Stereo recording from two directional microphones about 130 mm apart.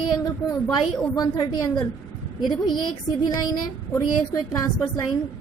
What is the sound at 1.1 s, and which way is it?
Speech, 30° left (ahead or behind).